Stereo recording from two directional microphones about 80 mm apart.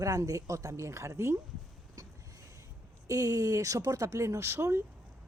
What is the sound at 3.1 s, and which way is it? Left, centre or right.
Speech, right.